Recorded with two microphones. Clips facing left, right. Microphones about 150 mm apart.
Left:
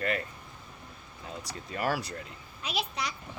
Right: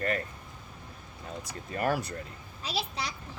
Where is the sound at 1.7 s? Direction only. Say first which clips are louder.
Right 2 dB; 45° right (ahead or behind).